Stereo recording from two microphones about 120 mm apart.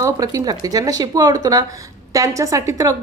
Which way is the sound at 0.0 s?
30° right (ahead or behind).